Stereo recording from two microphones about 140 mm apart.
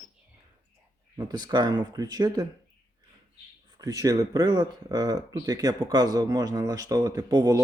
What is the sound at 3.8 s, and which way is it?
Speech, 25° right (ahead or behind).